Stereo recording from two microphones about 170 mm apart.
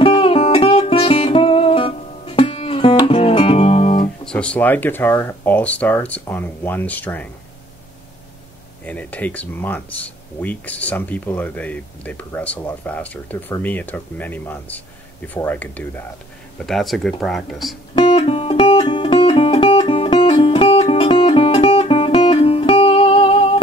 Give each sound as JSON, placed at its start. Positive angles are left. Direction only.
{"t": 0.0, "sound": "music", "side_deg": 30}
{"t": 4.3, "sound": "speech", "side_deg": 5}
{"t": 8.8, "sound": "speech", "side_deg": 10}
{"t": 17.9, "sound": "music", "side_deg": 30}